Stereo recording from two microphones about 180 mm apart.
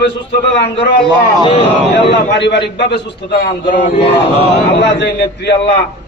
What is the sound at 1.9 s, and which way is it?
A man's voice, 75° left (ahead or behind).